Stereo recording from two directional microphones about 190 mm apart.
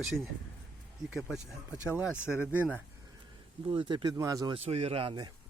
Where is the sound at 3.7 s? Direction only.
25° right (ahead or behind).